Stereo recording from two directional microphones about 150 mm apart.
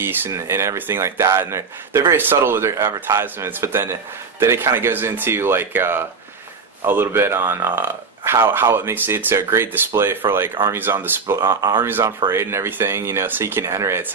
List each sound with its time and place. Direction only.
0.0 s speech: 15° right (ahead or behind)